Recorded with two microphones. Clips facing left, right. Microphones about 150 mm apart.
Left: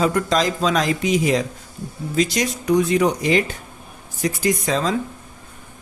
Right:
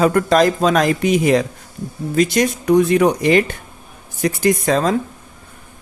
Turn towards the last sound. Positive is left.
turn(degrees=-55)  # may be behind; listen again after turning